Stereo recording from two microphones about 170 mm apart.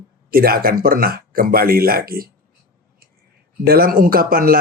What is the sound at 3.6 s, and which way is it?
Speech, 60° right (ahead or behind).